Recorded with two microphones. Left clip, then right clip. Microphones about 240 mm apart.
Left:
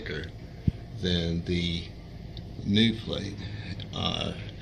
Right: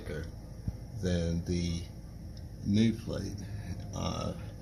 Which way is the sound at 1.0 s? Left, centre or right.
Centre.